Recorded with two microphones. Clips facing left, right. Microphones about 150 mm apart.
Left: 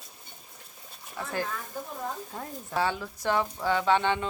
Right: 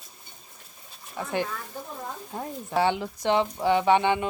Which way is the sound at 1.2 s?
20° right (ahead or behind).